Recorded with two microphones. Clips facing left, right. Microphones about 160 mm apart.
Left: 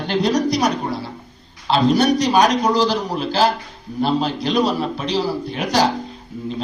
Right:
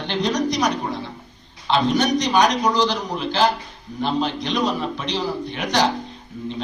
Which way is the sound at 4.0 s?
35° left (ahead or behind).